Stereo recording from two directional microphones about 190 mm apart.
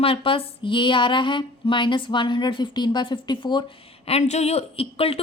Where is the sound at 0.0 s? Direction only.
30° left (ahead or behind).